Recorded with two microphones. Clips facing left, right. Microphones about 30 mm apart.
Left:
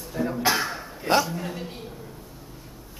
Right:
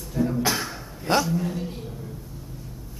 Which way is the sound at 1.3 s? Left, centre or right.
Centre.